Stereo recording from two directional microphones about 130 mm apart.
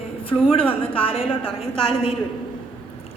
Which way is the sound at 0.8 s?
45° left (ahead or behind).